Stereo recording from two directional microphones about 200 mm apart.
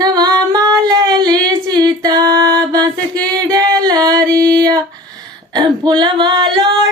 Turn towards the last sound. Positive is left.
turn(degrees=-20)  # may be behind; listen again after turning